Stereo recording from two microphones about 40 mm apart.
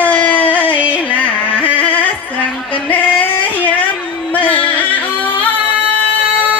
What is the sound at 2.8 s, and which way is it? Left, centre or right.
Female singing, left.